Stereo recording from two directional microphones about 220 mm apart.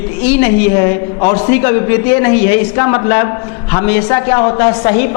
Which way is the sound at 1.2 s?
35° left (ahead or behind).